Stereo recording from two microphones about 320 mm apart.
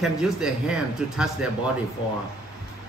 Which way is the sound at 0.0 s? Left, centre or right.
Centre.